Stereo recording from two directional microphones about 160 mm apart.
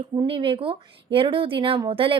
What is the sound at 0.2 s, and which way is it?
A woman's voice, 35° right (ahead or behind).